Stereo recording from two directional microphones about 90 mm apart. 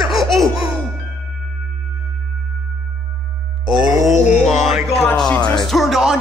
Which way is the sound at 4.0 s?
Centre (ahead or behind).